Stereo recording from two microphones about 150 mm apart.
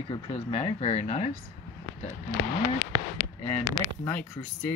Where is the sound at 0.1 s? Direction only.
40° left (ahead or behind).